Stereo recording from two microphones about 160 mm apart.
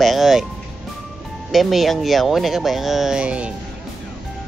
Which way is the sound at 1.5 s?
Centre (ahead or behind).